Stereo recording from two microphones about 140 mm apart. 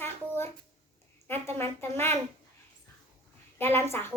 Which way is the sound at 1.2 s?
15° left (ahead or behind).